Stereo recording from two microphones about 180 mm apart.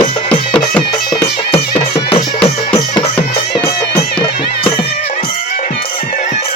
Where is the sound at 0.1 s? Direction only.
30° left (ahead or behind).